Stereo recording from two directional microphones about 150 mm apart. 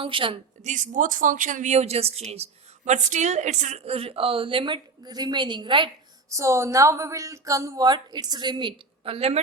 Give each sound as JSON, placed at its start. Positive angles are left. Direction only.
{"t": 0.0, "sound": "a woman's voice", "side_deg": -35}
{"t": 0.6, "sound": "a woman's voice", "side_deg": -55}
{"t": 6.3, "sound": "a woman's voice", "side_deg": -20}